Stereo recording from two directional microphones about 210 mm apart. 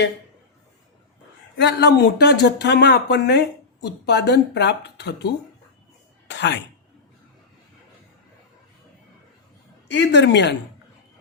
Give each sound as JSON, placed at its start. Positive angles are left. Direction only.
{"t": 1.5, "sound": "speech", "side_deg": 55}
{"t": 9.9, "sound": "speech", "side_deg": 55}